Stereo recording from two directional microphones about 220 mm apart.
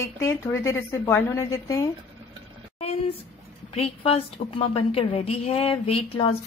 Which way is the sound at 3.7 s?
25° left (ahead or behind).